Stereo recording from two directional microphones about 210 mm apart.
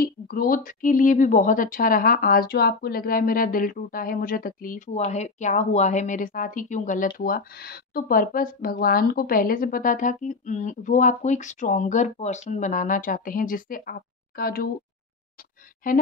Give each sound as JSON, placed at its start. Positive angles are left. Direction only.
{"t": 0.0, "sound": "a woman's voice", "side_deg": 45}
{"t": 15.8, "sound": "speech", "side_deg": 40}